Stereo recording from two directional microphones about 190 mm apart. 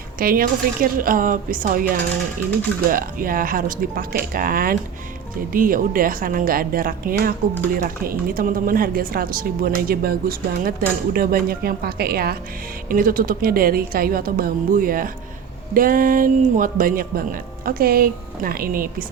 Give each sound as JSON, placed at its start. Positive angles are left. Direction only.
{"t": 0.2, "sound": "speech", "side_deg": -50}
{"t": 2.9, "sound": "speech", "side_deg": -50}